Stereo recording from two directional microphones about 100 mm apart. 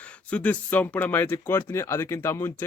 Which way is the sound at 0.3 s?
10° left (ahead or behind).